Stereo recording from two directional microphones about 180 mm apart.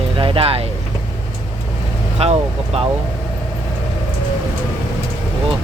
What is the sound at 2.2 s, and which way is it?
Speech, 35° right (ahead or behind).